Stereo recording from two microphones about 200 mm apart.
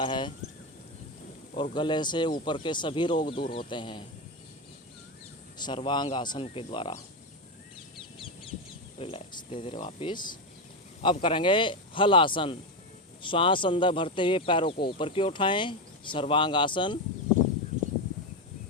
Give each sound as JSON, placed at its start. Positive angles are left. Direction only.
{"t": 0.0, "sound": "speech", "side_deg": 25}
{"t": 1.7, "sound": "speech", "side_deg": 20}
{"t": 5.5, "sound": "speech", "side_deg": 25}
{"t": 9.0, "sound": "speech", "side_deg": 30}